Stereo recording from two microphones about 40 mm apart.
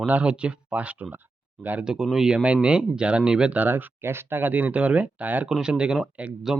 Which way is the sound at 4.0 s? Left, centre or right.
Right.